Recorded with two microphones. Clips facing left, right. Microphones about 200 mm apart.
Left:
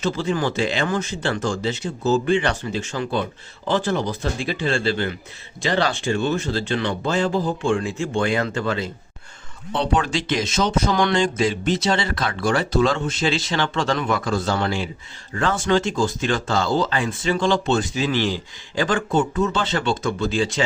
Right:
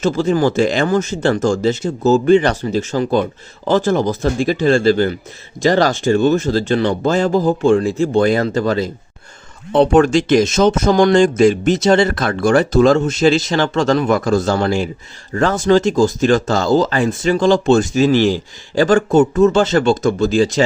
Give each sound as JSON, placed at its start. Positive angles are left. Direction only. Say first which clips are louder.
{"t": 0.0, "sound": "speech", "louder": "right 7 dB", "side_deg": -45}
{"t": 9.7, "sound": "speech", "louder": "right 11 dB", "side_deg": -50}